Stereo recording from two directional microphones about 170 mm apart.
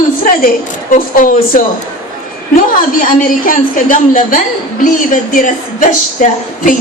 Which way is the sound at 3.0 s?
50° left (ahead or behind).